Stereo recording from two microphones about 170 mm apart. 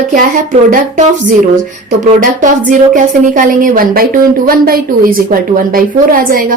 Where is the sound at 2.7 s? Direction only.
50° right (ahead or behind).